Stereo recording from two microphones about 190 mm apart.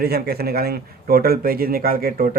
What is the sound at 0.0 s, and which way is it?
Speech, 55° right (ahead or behind).